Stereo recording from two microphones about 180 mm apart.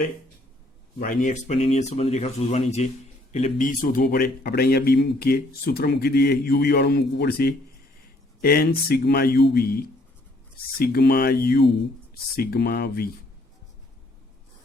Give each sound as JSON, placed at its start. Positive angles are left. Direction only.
{"t": 0.9, "sound": "a man's voice", "side_deg": 45}